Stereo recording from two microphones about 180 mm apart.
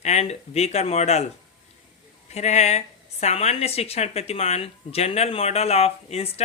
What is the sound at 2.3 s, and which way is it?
Speech, 40° left (ahead or behind).